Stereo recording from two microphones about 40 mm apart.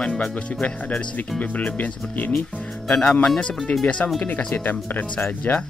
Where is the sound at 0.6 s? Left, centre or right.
Left.